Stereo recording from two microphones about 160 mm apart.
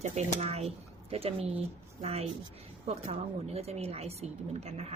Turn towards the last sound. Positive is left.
turn(degrees=-40)  # may be behind; listen again after turning